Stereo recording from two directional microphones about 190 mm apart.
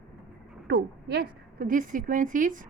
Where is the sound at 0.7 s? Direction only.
60° right (ahead or behind).